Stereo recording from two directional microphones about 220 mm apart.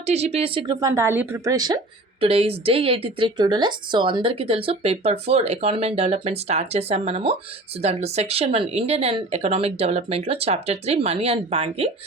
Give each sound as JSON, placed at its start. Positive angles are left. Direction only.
{"t": 0.0, "sound": "speech", "side_deg": -30}